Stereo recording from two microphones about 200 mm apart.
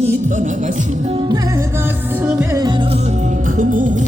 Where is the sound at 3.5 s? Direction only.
40° right (ahead or behind).